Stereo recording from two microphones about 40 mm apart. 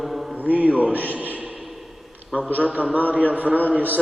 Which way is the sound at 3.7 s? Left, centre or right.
Right.